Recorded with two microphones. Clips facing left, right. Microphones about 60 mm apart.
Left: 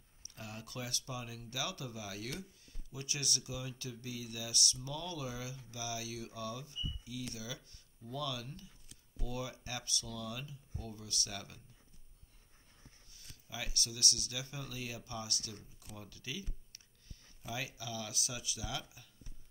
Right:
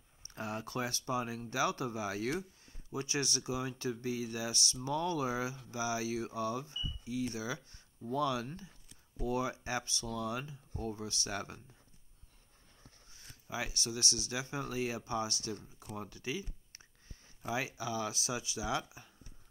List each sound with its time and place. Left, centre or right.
0.3 s speech: right
13.1 s speech: right